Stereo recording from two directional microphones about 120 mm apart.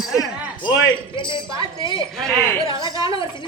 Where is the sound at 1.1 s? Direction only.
45° left (ahead or behind).